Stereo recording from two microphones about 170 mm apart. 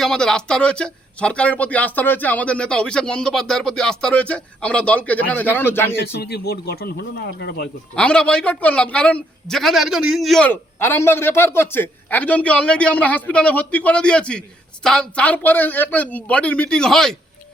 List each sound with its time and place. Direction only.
0.0 s a man's voice: 5° left (ahead or behind)
6.1 s speech: 75° left (ahead or behind)
7.9 s a man's voice: 5° left (ahead or behind)